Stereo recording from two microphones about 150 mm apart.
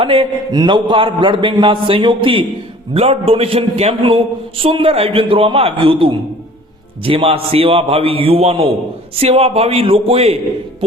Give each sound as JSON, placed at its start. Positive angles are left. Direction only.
{"t": 0.0, "sound": "a man's voice", "side_deg": -35}